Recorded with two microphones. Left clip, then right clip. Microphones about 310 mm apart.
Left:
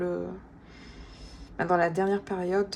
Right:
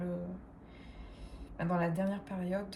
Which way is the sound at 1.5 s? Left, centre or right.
Left.